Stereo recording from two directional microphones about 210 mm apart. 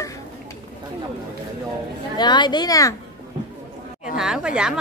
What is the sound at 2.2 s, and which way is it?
Speech, 20° left (ahead or behind).